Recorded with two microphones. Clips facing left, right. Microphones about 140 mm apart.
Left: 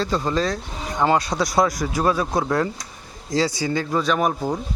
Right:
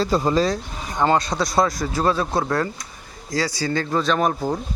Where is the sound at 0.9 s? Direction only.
10° left (ahead or behind).